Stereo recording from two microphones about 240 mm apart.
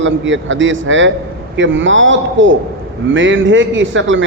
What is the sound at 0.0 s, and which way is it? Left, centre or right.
A man's voice, right.